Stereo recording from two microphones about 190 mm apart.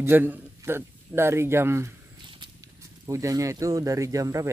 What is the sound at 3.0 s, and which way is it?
Speech, 15° right (ahead or behind).